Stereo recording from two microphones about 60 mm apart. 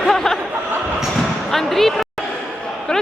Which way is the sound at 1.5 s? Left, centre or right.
Centre.